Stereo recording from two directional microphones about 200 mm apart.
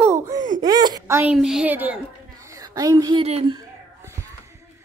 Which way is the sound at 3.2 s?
30° right (ahead or behind).